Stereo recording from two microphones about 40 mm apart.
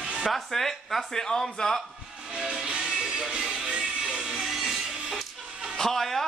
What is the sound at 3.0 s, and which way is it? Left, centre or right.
Music, centre.